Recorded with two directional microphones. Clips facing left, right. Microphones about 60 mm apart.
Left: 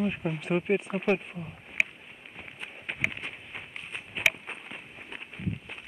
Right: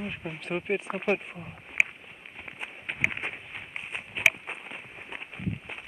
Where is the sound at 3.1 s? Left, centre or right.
Right.